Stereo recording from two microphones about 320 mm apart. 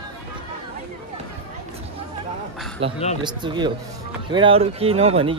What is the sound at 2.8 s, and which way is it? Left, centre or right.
Speech, centre.